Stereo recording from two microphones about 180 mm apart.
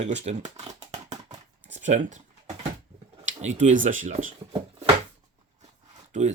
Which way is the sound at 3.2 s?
40° right (ahead or behind).